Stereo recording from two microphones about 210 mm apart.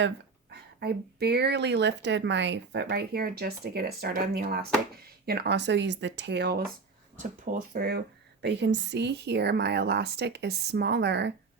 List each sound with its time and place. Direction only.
0.5 s speech: 50° right (ahead or behind)
7.2 s speech: 40° right (ahead or behind); by 11.3 s 55° right (ahead or behind)